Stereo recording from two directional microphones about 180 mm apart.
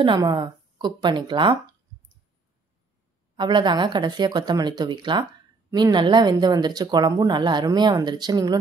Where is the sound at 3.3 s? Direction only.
25° right (ahead or behind).